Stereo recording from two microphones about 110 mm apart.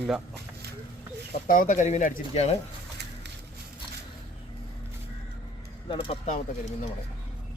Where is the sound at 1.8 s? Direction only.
90° left.